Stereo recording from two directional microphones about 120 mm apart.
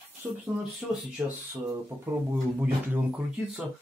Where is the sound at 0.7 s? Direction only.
10° right (ahead or behind).